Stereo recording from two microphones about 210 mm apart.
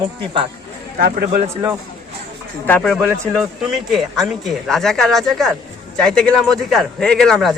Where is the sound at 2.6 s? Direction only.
5° left (ahead or behind).